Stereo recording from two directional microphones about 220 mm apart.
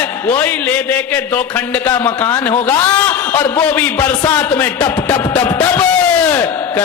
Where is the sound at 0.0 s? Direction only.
10° left (ahead or behind).